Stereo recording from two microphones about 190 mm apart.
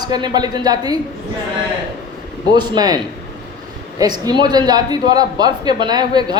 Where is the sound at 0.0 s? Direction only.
20° right (ahead or behind).